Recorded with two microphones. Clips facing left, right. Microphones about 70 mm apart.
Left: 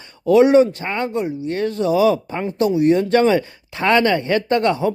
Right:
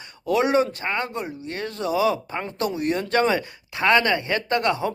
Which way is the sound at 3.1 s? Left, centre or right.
Right.